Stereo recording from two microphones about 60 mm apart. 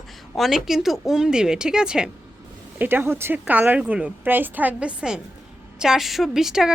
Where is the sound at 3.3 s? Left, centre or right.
Right.